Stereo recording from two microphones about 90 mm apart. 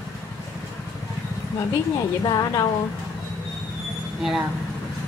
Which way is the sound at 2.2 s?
45° left (ahead or behind).